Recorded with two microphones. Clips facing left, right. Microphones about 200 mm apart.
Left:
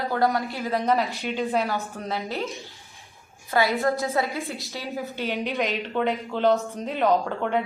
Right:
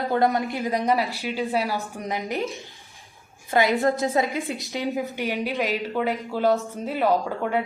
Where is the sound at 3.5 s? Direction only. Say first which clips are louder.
Right 2 dB; 20° right (ahead or behind).